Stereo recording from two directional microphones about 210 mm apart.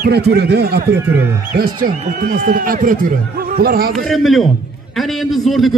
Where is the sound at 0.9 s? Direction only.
10° right (ahead or behind).